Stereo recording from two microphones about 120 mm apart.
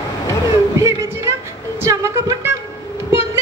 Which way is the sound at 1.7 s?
25° right (ahead or behind).